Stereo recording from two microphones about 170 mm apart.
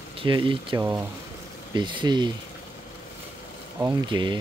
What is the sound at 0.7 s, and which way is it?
Speech, 15° right (ahead or behind).